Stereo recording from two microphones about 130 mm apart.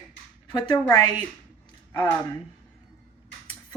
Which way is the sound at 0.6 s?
30° left (ahead or behind).